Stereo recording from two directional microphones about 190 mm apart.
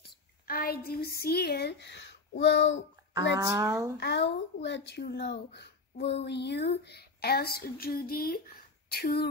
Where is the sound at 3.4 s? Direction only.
15° right (ahead or behind).